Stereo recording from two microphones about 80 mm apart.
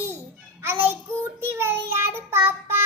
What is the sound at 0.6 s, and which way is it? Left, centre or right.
Music, right.